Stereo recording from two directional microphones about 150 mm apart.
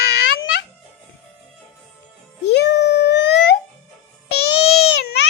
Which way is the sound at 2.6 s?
90° left.